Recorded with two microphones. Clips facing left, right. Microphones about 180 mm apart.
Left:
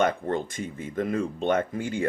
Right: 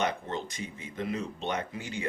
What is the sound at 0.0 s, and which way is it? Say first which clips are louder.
Speech: left 7 dB; 50° left (ahead or behind).